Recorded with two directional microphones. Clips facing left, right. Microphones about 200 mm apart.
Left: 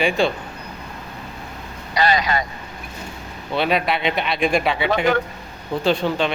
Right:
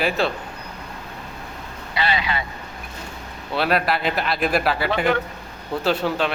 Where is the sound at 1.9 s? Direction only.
45° left (ahead or behind).